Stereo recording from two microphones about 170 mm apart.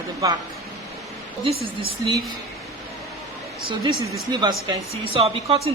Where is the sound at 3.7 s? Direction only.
30° right (ahead or behind).